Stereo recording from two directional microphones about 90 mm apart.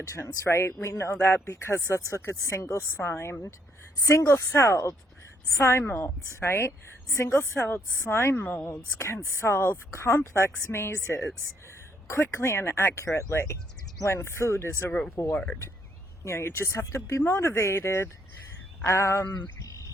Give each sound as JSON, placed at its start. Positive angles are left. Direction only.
{"t": 0.0, "sound": "speech", "side_deg": 30}
{"t": 12.0, "sound": "speech", "side_deg": 30}
{"t": 19.5, "sound": "a sound", "side_deg": 35}